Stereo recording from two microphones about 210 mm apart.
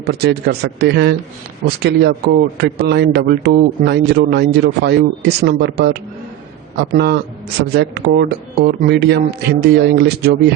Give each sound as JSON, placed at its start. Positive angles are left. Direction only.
{"t": 0.0, "sound": "a man's voice", "side_deg": -50}